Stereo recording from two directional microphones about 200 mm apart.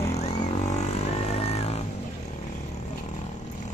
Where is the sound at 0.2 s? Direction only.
35° left (ahead or behind).